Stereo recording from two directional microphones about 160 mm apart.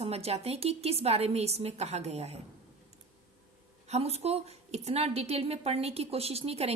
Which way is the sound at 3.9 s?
40° right (ahead or behind).